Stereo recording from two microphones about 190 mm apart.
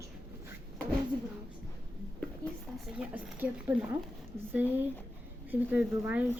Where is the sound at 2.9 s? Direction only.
5° right (ahead or behind).